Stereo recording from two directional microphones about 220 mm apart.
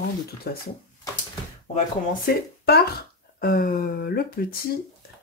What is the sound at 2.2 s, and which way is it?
Speech, 45° left (ahead or behind).